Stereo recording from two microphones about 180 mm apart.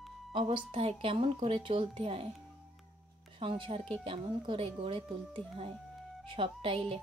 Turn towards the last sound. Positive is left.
turn(degrees=-30)  # may be behind; listen again after turning